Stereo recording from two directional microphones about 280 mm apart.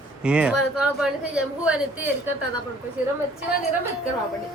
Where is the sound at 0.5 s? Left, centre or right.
Left.